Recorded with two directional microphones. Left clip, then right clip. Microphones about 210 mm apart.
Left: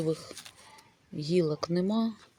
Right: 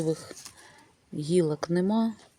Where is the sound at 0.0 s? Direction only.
10° right (ahead or behind).